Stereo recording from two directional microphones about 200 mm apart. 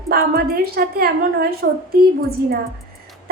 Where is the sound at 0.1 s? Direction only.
50° right (ahead or behind).